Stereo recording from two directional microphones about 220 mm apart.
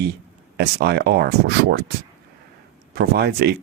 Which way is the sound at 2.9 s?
45° right (ahead or behind).